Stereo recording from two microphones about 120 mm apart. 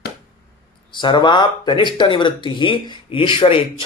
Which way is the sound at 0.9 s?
40° left (ahead or behind).